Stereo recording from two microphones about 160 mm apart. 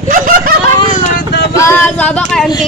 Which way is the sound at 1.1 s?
90° left.